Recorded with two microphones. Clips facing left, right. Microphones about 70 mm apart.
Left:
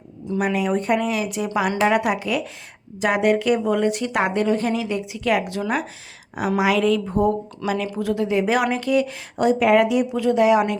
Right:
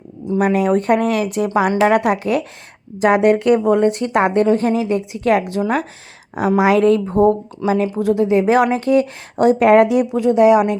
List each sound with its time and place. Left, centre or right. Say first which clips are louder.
0.3 s speech: right 6 dB; right
1.5 s speech: right 5 dB; right
10.2 s a woman's voice: right 5 dB; right